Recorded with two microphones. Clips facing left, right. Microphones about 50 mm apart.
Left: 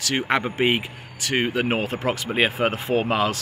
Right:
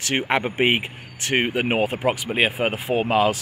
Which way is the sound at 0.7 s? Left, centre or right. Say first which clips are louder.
Right 1 dB; right.